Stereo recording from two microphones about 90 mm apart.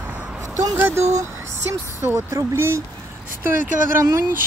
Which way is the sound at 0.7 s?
25° right (ahead or behind).